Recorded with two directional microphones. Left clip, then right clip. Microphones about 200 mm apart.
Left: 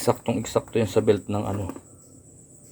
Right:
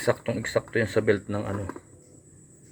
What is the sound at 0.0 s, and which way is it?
Speech, 20° left (ahead or behind).